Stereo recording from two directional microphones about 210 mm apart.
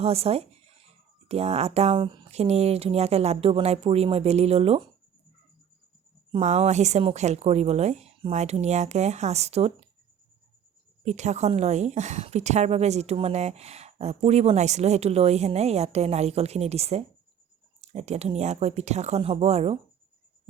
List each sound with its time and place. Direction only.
0.0 s speech: 30° right (ahead or behind)
6.3 s a woman's voice: 30° right (ahead or behind)
11.0 s a woman's voice: 35° right (ahead or behind)